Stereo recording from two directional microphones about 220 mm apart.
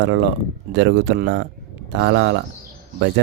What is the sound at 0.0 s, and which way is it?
Speech, 55° right (ahead or behind).